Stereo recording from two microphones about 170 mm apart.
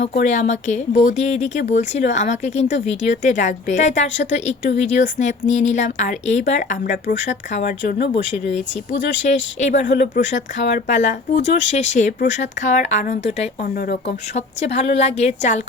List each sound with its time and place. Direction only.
0.2 s a woman's voice: 45° left (ahead or behind)
9.2 s a woman's voice: 45° left (ahead or behind)
13.7 s speech: 60° left (ahead or behind)
14.3 s a woman's voice: 40° left (ahead or behind)